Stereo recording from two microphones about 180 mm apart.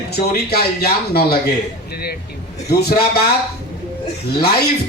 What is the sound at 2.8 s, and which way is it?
Speech, 60° left (ahead or behind).